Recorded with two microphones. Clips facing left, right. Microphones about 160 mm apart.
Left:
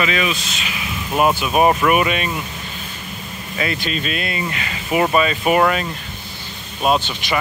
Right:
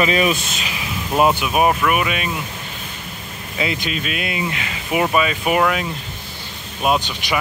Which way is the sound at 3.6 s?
15° right (ahead or behind).